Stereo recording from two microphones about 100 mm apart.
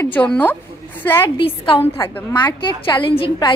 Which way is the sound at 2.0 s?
45° left (ahead or behind).